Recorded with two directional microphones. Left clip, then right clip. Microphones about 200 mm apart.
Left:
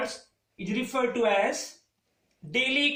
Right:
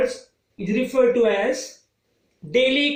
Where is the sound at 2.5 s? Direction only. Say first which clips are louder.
Right 7 dB; 20° left (ahead or behind).